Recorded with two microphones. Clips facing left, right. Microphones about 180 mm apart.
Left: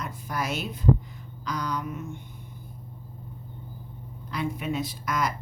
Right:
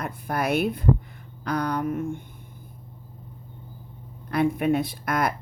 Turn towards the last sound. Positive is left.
turn(degrees=-55)  # may be behind; listen again after turning